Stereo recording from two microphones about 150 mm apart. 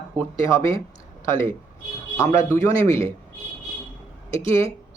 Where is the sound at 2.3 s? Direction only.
20° left (ahead or behind).